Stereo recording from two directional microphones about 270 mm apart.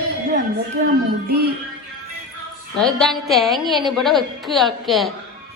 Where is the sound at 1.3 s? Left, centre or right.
Right.